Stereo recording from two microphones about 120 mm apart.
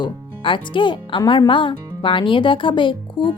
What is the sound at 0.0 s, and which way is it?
A woman's voice, 45° left (ahead or behind).